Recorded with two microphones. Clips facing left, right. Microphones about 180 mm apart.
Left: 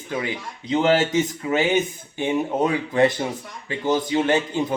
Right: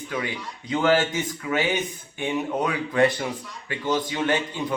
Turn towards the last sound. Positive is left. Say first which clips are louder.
# left 4 dB
turn(degrees=25)  # may be behind; listen again after turning